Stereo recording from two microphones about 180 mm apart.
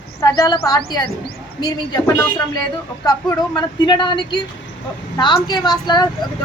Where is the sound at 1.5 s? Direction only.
20° left (ahead or behind).